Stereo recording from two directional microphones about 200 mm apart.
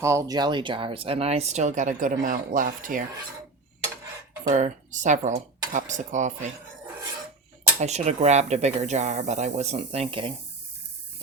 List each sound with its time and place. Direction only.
0.0 s speech: 15° right (ahead or behind); by 3.0 s 40° right (ahead or behind)
4.4 s speech: 40° right (ahead or behind)
7.8 s speech: 35° right (ahead or behind)